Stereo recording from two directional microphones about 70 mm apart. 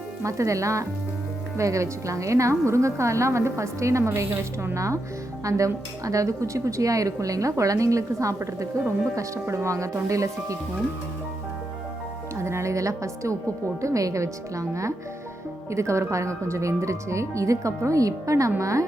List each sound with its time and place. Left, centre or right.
0.2 s speech: right
12.4 s music: right
13.8 s speech: right